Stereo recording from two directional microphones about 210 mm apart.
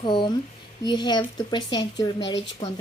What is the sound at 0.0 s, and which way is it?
Speech, 20° left (ahead or behind).